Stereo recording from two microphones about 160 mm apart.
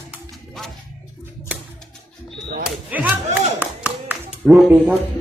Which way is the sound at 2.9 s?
10° right (ahead or behind).